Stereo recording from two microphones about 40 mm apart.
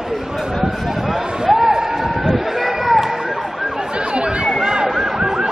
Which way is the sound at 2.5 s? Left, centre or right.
Centre.